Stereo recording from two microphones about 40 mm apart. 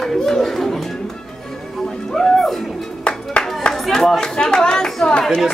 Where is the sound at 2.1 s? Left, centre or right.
Centre.